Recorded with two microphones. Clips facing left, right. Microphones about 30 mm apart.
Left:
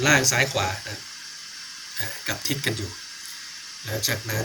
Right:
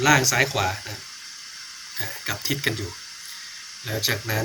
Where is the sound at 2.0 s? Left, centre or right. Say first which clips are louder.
Even; centre.